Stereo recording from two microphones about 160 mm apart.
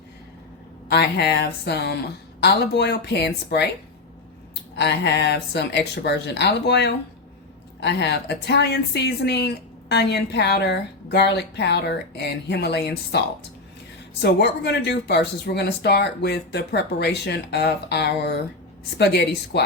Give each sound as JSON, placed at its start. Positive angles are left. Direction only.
{"t": 0.9, "sound": "speech", "side_deg": 90}
{"t": 4.8, "sound": "speech", "side_deg": 90}